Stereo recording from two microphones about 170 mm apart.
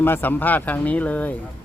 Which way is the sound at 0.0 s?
10° left (ahead or behind).